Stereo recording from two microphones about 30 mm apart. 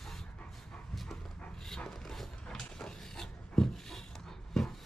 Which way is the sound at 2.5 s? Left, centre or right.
Centre.